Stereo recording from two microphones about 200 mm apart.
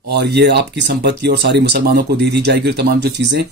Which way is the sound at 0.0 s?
55° right (ahead or behind).